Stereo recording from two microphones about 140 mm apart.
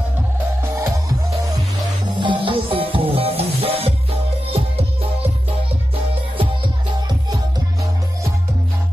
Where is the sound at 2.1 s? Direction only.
35° right (ahead or behind).